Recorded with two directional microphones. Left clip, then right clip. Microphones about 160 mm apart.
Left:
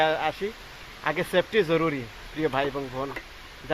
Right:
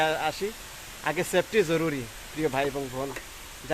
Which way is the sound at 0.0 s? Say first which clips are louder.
Left 2 dB; 5° right (ahead or behind).